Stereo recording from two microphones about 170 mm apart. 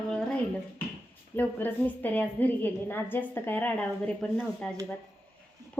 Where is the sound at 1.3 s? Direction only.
10° left (ahead or behind).